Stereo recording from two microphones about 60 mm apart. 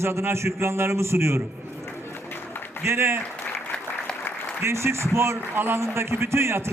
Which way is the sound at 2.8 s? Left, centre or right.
Right.